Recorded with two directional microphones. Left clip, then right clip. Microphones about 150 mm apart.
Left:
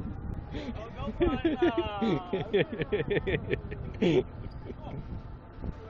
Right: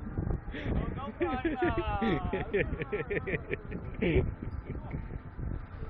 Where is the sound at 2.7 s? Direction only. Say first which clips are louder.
Left 4 dB; 30° left (ahead or behind).